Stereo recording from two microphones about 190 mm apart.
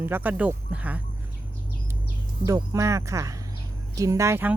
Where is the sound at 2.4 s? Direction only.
15° right (ahead or behind).